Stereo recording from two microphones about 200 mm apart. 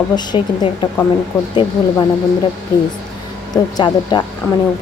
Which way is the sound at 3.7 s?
20° left (ahead or behind).